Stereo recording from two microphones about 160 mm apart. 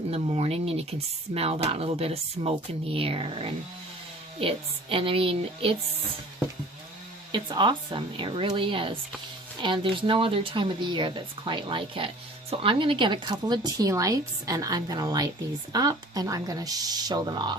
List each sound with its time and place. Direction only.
0.1 s speech: 40° right (ahead or behind)
7.3 s speech: 30° right (ahead or behind)